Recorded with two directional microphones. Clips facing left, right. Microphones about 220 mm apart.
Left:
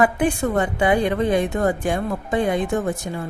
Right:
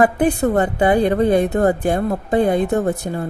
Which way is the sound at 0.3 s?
65° right (ahead or behind).